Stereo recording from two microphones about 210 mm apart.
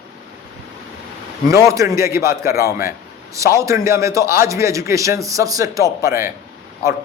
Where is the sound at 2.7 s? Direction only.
45° left (ahead or behind).